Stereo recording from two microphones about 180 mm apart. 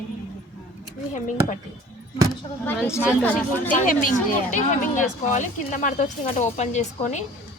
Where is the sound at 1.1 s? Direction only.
45° left (ahead or behind).